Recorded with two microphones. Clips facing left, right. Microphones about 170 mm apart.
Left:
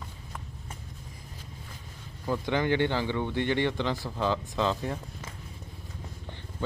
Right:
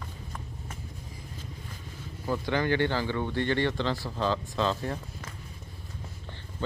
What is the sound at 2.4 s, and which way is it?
Speech, 20° left (ahead or behind).